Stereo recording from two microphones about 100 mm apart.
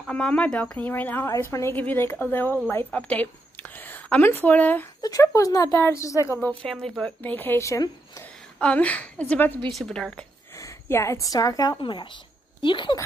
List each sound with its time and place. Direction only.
0.1 s speech: 10° left (ahead or behind)
1.3 s a woman's voice: 30° left (ahead or behind)
5.0 s speech: 35° left (ahead or behind)
6.6 s a woman's voice: 5° left (ahead or behind)
7.1 s speech: 15° left (ahead or behind)
7.6 s speech: 30° left (ahead or behind)
8.5 s speech: 10° left (ahead or behind)
9.7 s a woman's voice: centre (ahead or behind)
10.6 s a woman's voice: 30° left (ahead or behind)
11.8 s speech: 55° left (ahead or behind)